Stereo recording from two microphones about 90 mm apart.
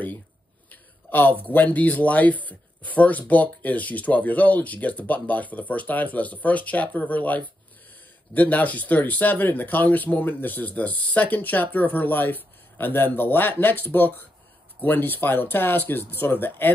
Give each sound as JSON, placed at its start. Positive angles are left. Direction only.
{"t": 0.7, "sound": "speech", "side_deg": 20}